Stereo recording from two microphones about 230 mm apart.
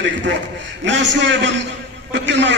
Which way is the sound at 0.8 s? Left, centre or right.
Right.